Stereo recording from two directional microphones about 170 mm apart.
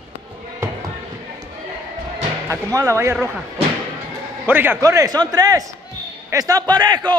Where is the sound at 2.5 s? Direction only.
15° right (ahead or behind).